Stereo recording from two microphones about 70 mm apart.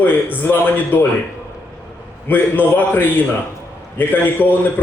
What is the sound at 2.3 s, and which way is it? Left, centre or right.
A man's voice, left.